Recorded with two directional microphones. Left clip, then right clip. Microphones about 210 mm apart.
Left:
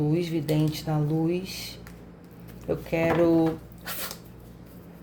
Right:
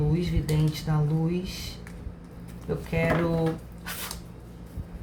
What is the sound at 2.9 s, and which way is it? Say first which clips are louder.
Speech: left 4 dB; 45° left (ahead or behind).